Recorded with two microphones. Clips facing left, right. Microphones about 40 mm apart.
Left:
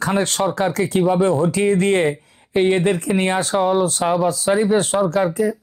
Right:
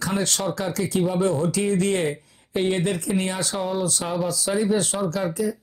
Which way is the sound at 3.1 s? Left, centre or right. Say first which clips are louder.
Left 6 dB; left.